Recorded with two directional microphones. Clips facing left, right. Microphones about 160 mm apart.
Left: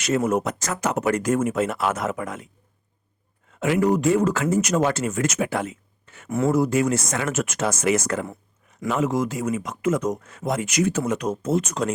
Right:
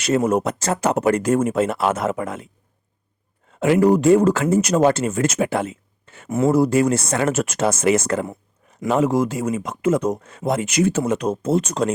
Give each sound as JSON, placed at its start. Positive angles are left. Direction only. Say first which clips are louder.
{"t": 0.0, "sound": "speech", "louder": "right 3 dB", "side_deg": -30}
{"t": 3.5, "sound": "speech", "louder": "right 5 dB", "side_deg": -30}
{"t": 6.5, "sound": "speech", "louder": "right 4 dB", "side_deg": -35}